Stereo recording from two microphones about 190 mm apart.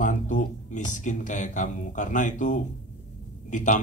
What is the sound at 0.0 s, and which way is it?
Speech, 40° left (ahead or behind).